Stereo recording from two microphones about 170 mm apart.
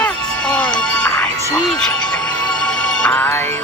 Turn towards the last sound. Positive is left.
turn(degrees=10)  # may be behind; listen again after turning